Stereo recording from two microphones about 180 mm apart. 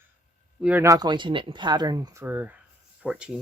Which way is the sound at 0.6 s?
10° right (ahead or behind).